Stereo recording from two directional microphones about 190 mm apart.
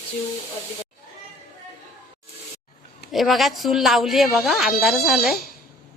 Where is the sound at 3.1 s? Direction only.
Centre (ahead or behind).